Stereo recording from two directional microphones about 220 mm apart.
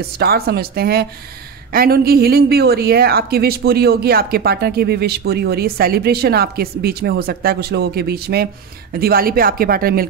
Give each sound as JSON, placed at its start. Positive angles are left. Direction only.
{"t": 0.0, "sound": "a woman's voice", "side_deg": -45}